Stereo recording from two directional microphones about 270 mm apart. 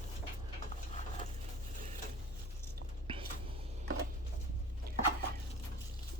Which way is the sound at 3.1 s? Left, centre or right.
Centre.